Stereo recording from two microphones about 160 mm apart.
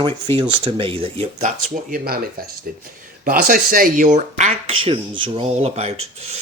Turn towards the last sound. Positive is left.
turn(degrees=-45)  # may be behind; listen again after turning